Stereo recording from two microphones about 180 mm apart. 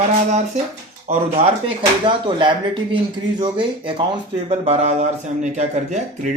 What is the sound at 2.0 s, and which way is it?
Speech, 25° right (ahead or behind).